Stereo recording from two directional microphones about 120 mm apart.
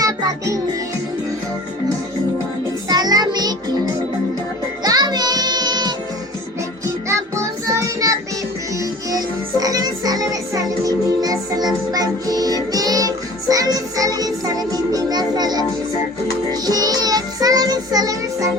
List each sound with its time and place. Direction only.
0.0 s music: 30° right (ahead or behind)
2.9 s music: 35° right (ahead or behind)
4.8 s music: 35° right (ahead or behind)
6.8 s music: 25° right (ahead or behind)
16.5 s child singing: 35° right (ahead or behind)